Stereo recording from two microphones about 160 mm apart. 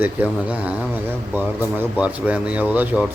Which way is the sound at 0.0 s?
10° right (ahead or behind).